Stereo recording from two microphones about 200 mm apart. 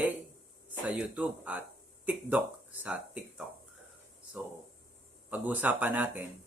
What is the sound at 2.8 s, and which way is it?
Speech, 5° right (ahead or behind).